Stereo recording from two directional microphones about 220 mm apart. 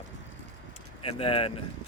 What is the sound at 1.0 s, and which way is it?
Speech, 25° left (ahead or behind).